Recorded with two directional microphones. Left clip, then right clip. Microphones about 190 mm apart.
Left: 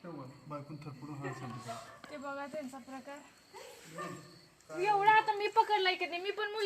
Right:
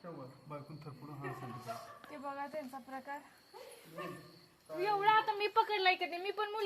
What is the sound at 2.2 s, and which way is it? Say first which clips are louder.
Speech: left 1 dB; 15° left (ahead or behind).